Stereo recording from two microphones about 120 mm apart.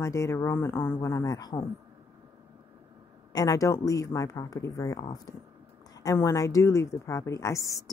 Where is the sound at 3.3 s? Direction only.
30° left (ahead or behind).